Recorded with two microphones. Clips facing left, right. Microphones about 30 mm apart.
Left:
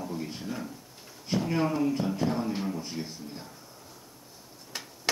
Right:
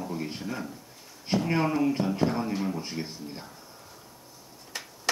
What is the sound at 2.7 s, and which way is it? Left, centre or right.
Speech, right.